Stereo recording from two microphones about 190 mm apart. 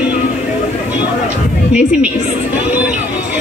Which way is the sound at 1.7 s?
5° right (ahead or behind).